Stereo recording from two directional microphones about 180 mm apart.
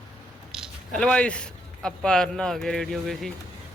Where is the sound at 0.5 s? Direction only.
Centre (ahead or behind).